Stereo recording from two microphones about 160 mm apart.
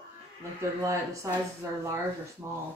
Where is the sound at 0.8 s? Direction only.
20° right (ahead or behind).